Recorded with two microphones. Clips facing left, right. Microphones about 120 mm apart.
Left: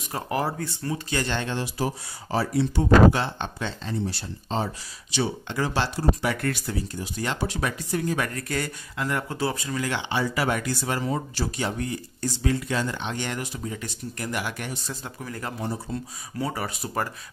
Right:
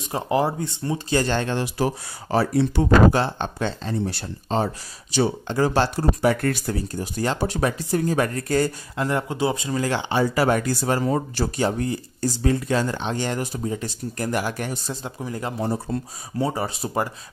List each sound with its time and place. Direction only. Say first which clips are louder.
0.0 s speech: right 5 dB; 20° right (ahead or behind); by 1.6 s 45° right (ahead or behind)
2.3 s speech: right 4 dB; 60° right (ahead or behind)
3.1 s speech: right 3 dB; 40° right (ahead or behind)
5.1 s speech: right 5 dB; 40° right (ahead or behind)
9.3 s speech: right 4 dB; 20° right (ahead or behind)
9.8 s speech: right 5 dB; 35° right (ahead or behind)
14.9 s speech: right 5 dB; 20° right (ahead or behind)
15.6 s speech: right 6 dB; 45° right (ahead or behind)
16.3 s speech: right 5 dB; 25° right (ahead or behind)